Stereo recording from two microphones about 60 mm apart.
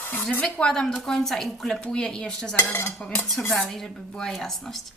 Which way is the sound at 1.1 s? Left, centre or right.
Centre.